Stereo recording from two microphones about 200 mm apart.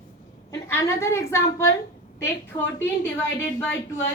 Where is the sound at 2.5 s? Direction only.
25° left (ahead or behind).